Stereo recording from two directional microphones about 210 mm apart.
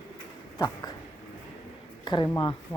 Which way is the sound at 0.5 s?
20° left (ahead or behind).